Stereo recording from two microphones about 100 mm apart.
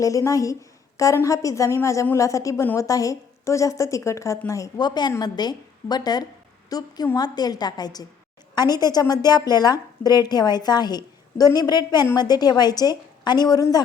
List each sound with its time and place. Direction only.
0.0 s a woman's voice: 35° left (ahead or behind)